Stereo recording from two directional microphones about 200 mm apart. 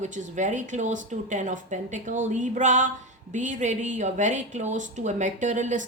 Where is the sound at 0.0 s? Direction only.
40° right (ahead or behind).